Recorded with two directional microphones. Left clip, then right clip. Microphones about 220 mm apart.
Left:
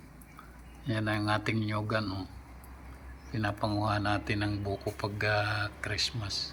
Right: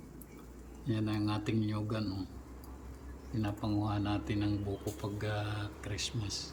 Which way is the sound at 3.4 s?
35° left (ahead or behind).